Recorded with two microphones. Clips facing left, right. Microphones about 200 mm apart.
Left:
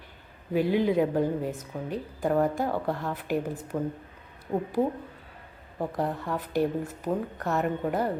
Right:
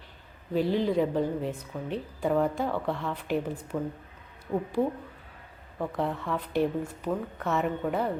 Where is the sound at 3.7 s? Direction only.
15° left (ahead or behind).